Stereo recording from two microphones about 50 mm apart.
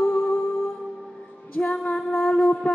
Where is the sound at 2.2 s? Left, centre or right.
Left.